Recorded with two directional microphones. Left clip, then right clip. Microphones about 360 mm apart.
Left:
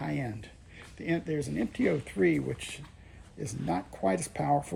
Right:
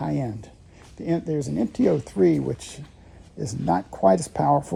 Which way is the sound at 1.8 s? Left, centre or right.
Right.